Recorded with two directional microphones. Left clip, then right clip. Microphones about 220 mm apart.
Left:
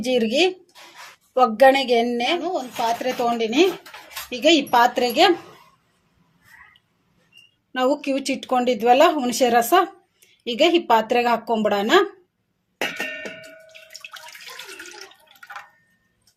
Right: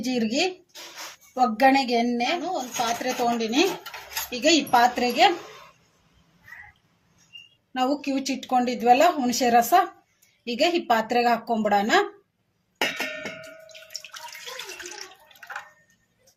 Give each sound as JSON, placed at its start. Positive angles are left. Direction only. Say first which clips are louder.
{"t": 0.0, "sound": "a woman's voice", "louder": "left 6 dB", "side_deg": 35}
{"t": 7.7, "sound": "a woman's voice", "louder": "left 4 dB", "side_deg": 35}